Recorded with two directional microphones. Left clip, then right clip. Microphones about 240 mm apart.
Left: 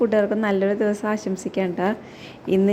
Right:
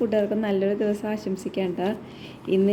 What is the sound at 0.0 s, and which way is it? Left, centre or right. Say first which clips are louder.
A woman's voice: left 4 dB; centre.